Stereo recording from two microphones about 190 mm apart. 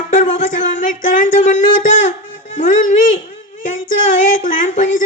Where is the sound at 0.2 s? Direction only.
40° left (ahead or behind).